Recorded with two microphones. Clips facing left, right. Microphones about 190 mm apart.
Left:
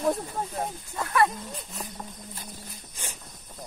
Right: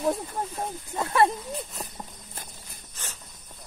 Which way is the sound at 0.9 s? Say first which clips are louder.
Right 2 dB; 25° right (ahead or behind).